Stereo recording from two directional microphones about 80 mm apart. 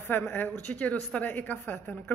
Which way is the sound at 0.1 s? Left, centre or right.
Left.